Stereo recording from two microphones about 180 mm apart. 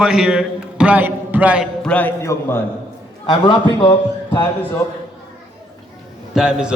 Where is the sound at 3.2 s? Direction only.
25° left (ahead or behind).